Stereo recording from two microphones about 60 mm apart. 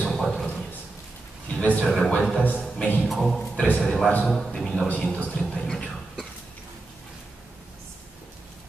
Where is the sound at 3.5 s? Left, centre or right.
Left.